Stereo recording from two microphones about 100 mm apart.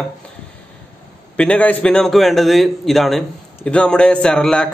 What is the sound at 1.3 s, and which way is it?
A man's voice, 10° left (ahead or behind).